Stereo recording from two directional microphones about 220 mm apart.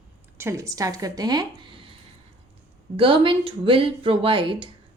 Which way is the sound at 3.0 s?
25° right (ahead or behind).